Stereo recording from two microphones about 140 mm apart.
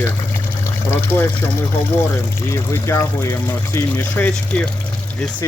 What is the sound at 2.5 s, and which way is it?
Speech, 20° left (ahead or behind).